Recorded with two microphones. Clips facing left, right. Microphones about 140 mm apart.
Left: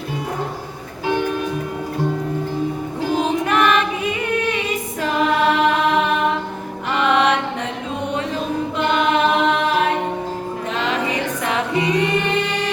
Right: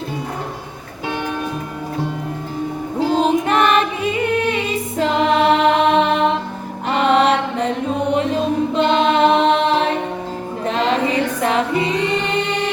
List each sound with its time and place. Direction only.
3.2 s music: 30° right (ahead or behind)
6.9 s mantra: 35° right (ahead or behind)
8.7 s choir: 25° right (ahead or behind)
10.7 s music: 35° right (ahead or behind)